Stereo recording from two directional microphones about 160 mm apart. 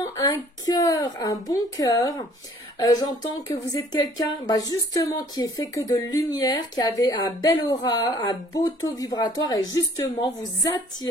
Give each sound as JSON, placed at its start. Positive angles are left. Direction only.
{"t": 0.0, "sound": "speech", "side_deg": 20}